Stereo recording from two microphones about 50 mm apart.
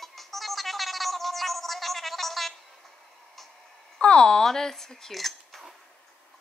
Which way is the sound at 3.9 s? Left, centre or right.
Centre.